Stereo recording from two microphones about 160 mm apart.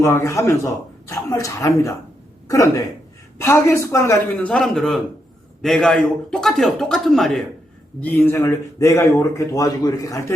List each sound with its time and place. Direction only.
0.0 s speech: 15° left (ahead or behind)
3.3 s speech: 15° left (ahead or behind)
4.4 s a man's voice: 5° left (ahead or behind)
8.0 s speech: 15° left (ahead or behind)